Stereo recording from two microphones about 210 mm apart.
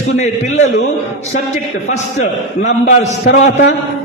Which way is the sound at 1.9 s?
35° left (ahead or behind).